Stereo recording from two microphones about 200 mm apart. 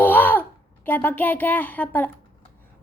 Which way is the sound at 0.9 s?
10° left (ahead or behind).